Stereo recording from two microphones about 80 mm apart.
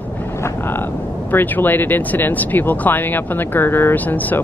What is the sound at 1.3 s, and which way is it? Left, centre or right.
Speech, left.